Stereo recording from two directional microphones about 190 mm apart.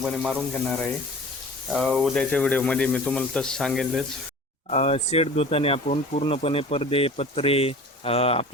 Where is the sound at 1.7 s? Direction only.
Centre (ahead or behind).